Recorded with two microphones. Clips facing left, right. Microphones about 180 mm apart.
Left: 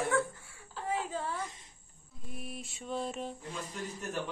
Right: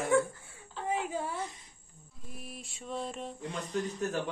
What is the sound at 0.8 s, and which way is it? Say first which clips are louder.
Speech: right 2 dB; 20° right (ahead or behind).